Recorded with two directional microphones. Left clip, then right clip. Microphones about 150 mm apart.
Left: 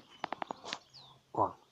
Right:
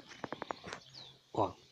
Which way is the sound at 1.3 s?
5° right (ahead or behind).